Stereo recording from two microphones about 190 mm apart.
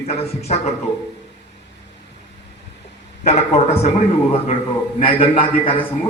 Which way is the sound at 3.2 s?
35° left (ahead or behind).